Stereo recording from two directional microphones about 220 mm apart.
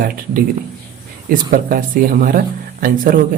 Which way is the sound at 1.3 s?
40° right (ahead or behind).